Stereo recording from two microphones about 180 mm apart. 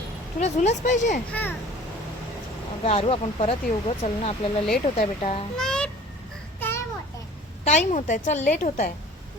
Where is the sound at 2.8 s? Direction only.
35° left (ahead or behind).